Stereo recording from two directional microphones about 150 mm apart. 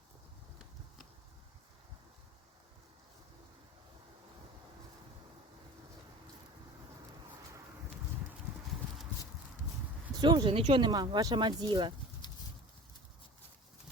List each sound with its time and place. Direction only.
10.2 s speech: 30° right (ahead or behind)